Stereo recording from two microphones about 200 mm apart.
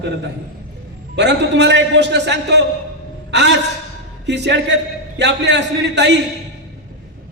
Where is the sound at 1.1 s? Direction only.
60° right (ahead or behind).